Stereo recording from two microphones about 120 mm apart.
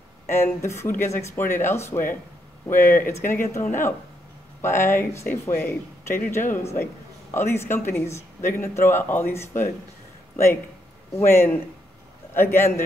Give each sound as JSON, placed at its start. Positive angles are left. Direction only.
{"t": 0.3, "sound": "a woman's voice", "side_deg": 20}